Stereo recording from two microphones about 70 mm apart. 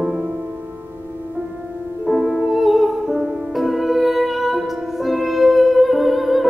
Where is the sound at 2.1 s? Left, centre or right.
Centre.